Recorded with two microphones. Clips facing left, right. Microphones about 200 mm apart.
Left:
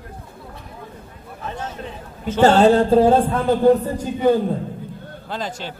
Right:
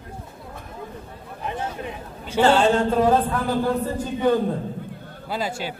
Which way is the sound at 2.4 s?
40° left (ahead or behind).